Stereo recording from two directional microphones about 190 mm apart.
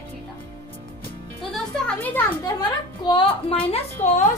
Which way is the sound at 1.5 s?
10° left (ahead or behind).